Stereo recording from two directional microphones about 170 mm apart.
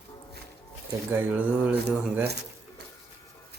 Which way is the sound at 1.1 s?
10° right (ahead or behind).